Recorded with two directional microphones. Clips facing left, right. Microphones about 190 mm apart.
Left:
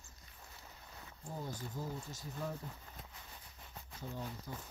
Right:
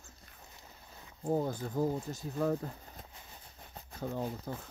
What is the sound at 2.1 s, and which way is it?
Speech, 70° right (ahead or behind).